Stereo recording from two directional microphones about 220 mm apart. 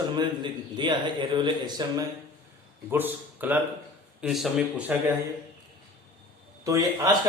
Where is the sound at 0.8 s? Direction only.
20° right (ahead or behind).